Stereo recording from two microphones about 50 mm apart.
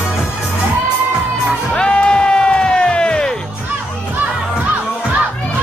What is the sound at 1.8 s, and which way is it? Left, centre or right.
Music, centre.